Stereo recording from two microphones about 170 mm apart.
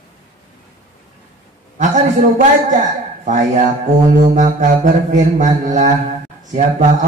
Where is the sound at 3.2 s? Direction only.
45° right (ahead or behind).